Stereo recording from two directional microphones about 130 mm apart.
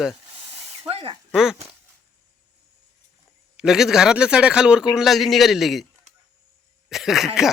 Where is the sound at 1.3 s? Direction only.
Centre (ahead or behind).